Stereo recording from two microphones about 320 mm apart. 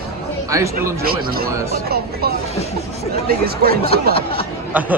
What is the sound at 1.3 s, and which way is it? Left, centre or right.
Speech, right.